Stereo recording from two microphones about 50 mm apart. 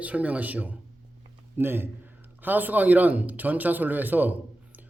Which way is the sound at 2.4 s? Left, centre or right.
Right.